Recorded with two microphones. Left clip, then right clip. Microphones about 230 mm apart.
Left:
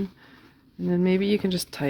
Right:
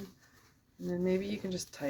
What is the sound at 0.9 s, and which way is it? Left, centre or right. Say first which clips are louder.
Speech: left 10 dB; left.